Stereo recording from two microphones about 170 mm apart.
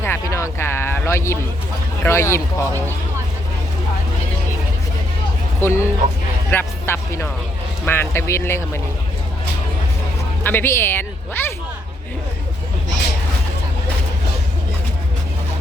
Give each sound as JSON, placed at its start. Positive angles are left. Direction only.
{"t": 0.0, "sound": "a sound", "side_deg": 15}
{"t": 2.0, "sound": "speech", "side_deg": 15}
{"t": 5.5, "sound": "speech", "side_deg": 15}
{"t": 10.4, "sound": "a woman's voice", "side_deg": 15}